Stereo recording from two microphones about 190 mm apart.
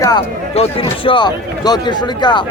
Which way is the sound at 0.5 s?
30° left (ahead or behind).